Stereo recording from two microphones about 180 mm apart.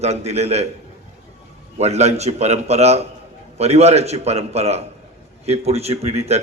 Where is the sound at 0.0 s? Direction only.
35° right (ahead or behind).